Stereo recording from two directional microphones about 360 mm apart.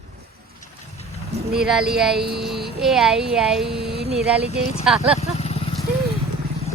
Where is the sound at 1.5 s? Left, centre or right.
Centre.